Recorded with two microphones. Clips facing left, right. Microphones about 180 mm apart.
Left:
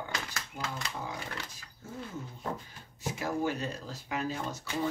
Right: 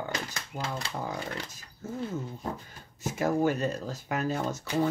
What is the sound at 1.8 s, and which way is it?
Speech, 45° right (ahead or behind).